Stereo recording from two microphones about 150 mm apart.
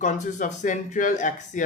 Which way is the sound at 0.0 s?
55° left (ahead or behind).